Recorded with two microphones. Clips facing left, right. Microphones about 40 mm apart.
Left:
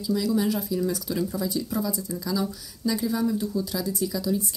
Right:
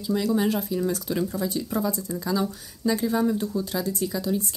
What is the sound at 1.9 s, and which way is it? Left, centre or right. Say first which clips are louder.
Speech: right 2 dB; right.